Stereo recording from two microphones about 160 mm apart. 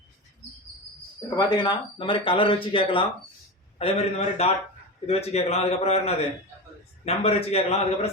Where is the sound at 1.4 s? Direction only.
25° left (ahead or behind).